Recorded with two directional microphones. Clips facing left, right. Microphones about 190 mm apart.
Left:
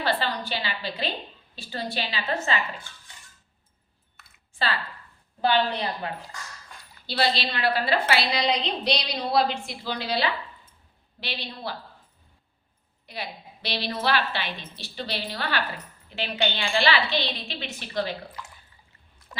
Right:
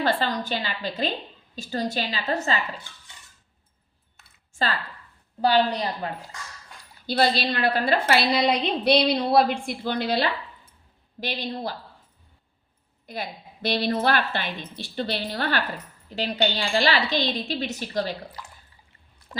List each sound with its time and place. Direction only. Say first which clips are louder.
0.0 s a woman's voice: right 3 dB; 45° right (ahead or behind)
5.4 s a woman's voice: right 3 dB; 40° right (ahead or behind)
7.1 s a woman's voice: right 4 dB; 50° right (ahead or behind)
13.1 s a woman's voice: right 3 dB; 50° right (ahead or behind)
16.0 s a woman's voice: right 3 dB; 40° right (ahead or behind)